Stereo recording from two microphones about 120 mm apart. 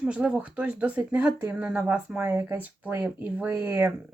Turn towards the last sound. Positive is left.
turn(degrees=-25)  # may be behind; listen again after turning